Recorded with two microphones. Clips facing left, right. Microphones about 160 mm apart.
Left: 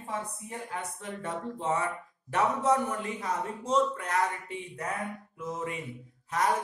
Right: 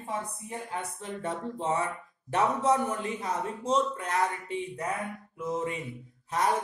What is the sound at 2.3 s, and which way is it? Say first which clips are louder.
A man's voice: right 1 dB; 25° right (ahead or behind).